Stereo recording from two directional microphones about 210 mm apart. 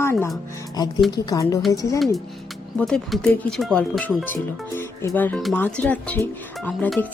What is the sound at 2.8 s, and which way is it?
Speech, centre (ahead or behind).